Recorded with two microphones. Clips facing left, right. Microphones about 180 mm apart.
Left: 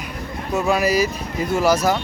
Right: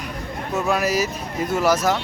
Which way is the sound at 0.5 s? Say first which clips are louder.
Left 3 dB; centre (ahead or behind).